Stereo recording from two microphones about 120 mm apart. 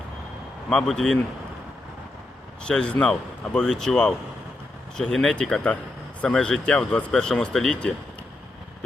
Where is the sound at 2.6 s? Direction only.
5° left (ahead or behind).